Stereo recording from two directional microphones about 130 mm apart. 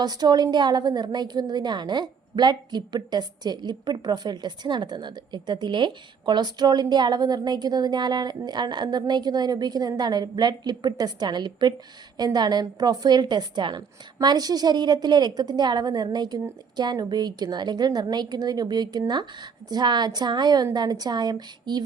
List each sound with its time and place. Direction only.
0.0 s a woman's voice: 30° right (ahead or behind)